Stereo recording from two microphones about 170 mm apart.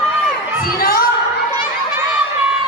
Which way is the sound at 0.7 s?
60° left (ahead or behind).